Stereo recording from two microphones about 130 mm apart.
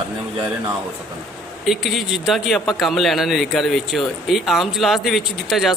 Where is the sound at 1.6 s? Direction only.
Centre (ahead or behind).